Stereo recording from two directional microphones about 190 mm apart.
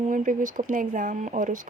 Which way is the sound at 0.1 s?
45° right (ahead or behind).